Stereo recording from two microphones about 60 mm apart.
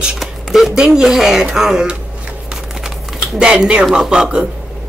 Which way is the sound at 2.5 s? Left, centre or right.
Centre.